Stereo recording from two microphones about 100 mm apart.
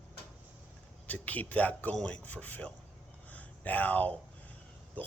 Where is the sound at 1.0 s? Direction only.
15° left (ahead or behind).